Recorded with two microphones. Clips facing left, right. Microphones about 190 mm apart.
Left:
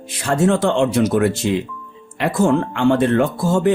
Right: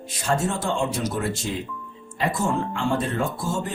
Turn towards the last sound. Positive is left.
turn(degrees=75)  # may be behind; listen again after turning